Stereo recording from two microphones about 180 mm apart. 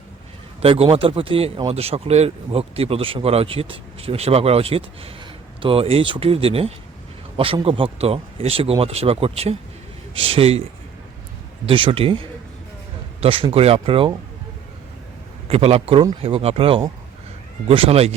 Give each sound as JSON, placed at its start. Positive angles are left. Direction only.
{"t": 0.6, "sound": "speech", "side_deg": -30}
{"t": 11.6, "sound": "speech", "side_deg": -30}
{"t": 13.2, "sound": "speech", "side_deg": -30}
{"t": 15.4, "sound": "speech", "side_deg": -35}